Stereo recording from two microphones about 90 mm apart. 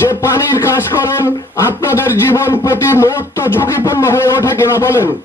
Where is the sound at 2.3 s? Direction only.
25° left (ahead or behind).